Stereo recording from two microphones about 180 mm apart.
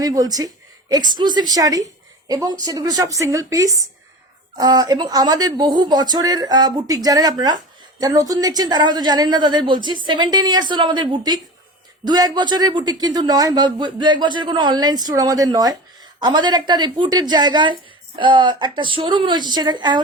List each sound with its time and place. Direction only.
0.0 s speech: 20° right (ahead or behind)